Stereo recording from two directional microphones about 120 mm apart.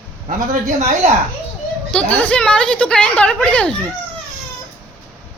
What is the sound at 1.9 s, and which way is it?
A woman's voice, 10° left (ahead or behind).